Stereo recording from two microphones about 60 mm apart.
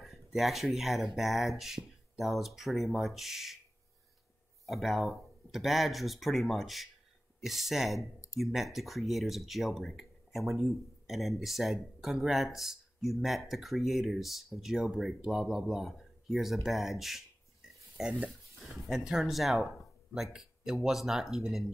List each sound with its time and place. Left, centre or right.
0.0 s speech: centre
4.6 s speech: centre
8.0 s speech: left
8.4 s speech: centre